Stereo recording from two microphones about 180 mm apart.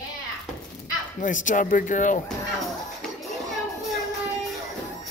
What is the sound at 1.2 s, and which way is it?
Speech, 45° left (ahead or behind).